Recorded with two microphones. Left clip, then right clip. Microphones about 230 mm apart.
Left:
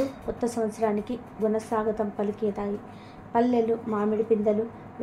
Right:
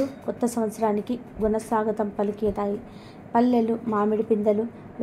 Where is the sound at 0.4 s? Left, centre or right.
Right.